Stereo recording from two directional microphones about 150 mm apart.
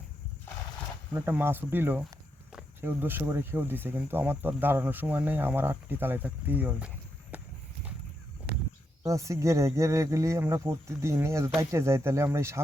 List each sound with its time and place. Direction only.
1.1 s speech: 15° right (ahead or behind)
8.5 s a sound: 90° right
9.0 s speech: 20° right (ahead or behind)